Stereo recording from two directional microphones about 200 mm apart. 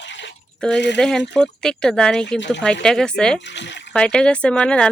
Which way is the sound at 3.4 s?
60° left (ahead or behind).